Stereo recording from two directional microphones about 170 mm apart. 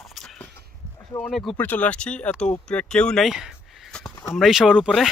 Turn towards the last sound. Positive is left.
turn(degrees=-5)  # may be behind; listen again after turning